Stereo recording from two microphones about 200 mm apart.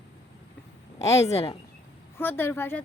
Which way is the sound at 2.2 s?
10° left (ahead or behind).